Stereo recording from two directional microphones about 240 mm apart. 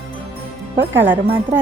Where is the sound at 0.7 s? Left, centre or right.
Right.